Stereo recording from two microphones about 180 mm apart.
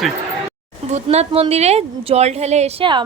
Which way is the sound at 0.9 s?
40° right (ahead or behind).